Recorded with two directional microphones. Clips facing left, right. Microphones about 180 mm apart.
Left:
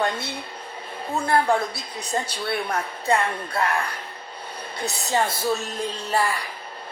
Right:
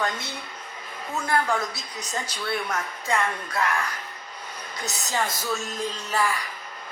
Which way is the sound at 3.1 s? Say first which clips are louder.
Left 2 dB; 30° left (ahead or behind).